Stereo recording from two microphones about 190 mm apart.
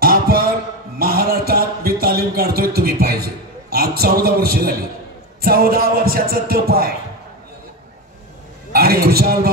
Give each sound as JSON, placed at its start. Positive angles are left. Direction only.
{"t": 0.0, "sound": "a sound", "side_deg": -50}
{"t": 3.7, "sound": "music", "side_deg": -55}
{"t": 8.7, "sound": "music", "side_deg": -50}